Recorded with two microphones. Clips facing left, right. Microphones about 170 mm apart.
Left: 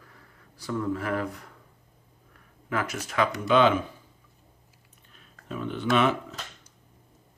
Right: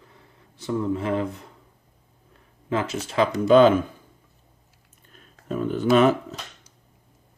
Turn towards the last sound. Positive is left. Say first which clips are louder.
# right 6 dB
turn(degrees=-40)  # may be behind; listen again after turning